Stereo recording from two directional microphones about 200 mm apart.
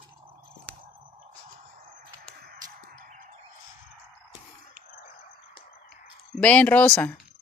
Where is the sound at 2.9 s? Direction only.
40° right (ahead or behind).